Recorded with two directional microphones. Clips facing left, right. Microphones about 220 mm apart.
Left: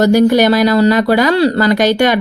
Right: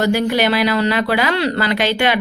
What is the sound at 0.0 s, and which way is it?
Speech, 45° left (ahead or behind).